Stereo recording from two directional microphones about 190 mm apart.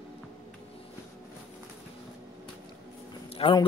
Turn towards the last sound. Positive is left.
turn(degrees=30)  # may be behind; listen again after turning